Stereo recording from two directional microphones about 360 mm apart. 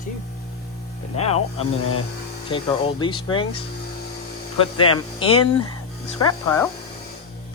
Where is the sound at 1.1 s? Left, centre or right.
Centre.